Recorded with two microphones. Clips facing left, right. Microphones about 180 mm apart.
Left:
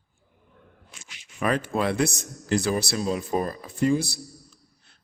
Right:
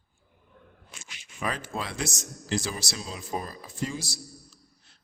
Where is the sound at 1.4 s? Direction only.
60° left (ahead or behind).